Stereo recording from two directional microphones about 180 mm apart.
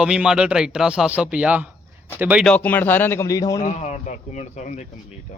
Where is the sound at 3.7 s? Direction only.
40° left (ahead or behind).